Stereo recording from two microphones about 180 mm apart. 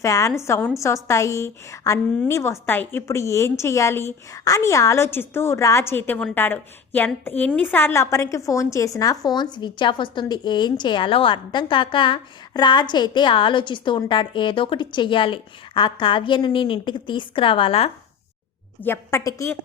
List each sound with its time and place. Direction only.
0.0 s a woman's voice: 15° left (ahead or behind); by 17.9 s 35° left (ahead or behind)
18.8 s a woman's voice: 15° left (ahead or behind)